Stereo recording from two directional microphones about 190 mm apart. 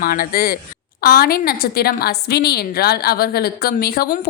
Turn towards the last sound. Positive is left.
turn(degrees=55)  # may be behind; listen again after turning